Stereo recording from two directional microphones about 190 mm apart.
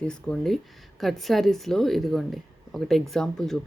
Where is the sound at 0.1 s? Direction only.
5° left (ahead or behind).